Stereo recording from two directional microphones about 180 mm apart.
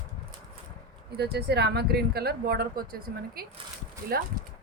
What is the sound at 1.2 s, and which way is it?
Speech, 65° right (ahead or behind).